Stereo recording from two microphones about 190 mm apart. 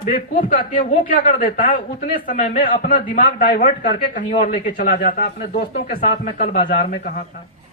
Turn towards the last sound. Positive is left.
turn(degrees=50)  # may be behind; listen again after turning